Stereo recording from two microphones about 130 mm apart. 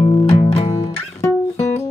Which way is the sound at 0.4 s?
50° left (ahead or behind).